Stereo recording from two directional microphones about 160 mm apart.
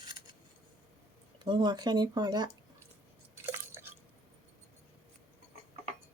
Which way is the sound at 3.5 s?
15° right (ahead or behind).